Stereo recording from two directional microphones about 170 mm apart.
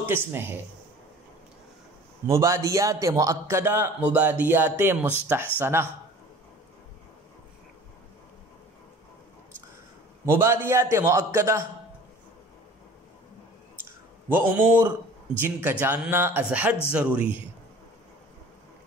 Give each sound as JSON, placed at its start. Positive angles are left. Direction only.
{"t": 0.0, "sound": "a man's voice", "side_deg": -15}
{"t": 2.2, "sound": "a man's voice", "side_deg": -20}
{"t": 10.2, "sound": "a man's voice", "side_deg": -15}
{"t": 14.3, "sound": "a man's voice", "side_deg": -10}